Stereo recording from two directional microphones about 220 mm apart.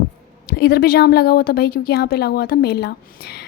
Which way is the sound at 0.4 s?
45° left (ahead or behind).